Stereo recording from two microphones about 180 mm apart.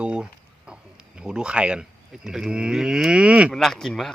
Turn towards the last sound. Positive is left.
turn(degrees=0)  # may be behind; listen again after turning